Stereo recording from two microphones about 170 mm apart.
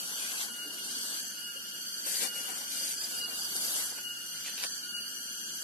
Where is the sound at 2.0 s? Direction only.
55° left (ahead or behind).